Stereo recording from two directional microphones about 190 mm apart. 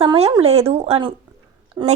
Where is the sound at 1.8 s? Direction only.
20° right (ahead or behind).